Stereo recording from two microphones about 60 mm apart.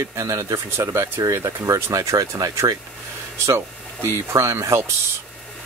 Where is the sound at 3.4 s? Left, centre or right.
Right.